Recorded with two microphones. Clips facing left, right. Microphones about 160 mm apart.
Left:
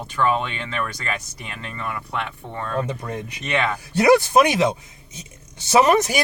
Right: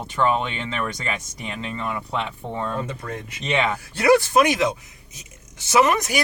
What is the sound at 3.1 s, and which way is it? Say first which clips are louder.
Speech: left 2 dB; 20° left (ahead or behind).